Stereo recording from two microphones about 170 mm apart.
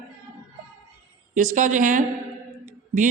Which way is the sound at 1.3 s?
50° right (ahead or behind).